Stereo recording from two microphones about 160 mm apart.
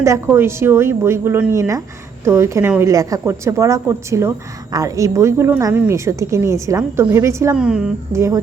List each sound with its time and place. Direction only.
0.0 s a woman's voice: 15° right (ahead or behind)
7.5 s a woman's voice: 5° right (ahead or behind)
8.1 s speech: 15° right (ahead or behind)